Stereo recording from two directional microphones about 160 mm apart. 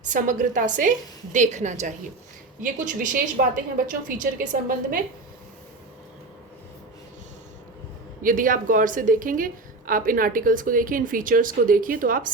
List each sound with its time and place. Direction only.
0.0 s a woman's voice: 55° right (ahead or behind)
8.2 s a woman's voice: 60° right (ahead or behind)